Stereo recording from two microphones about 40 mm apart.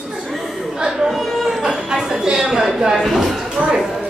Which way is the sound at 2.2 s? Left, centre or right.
Centre.